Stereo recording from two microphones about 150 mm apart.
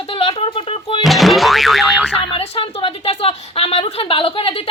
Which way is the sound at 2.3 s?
40° left (ahead or behind).